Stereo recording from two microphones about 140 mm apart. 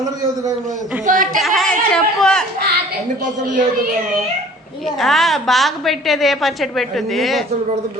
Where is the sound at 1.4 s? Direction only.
Centre (ahead or behind).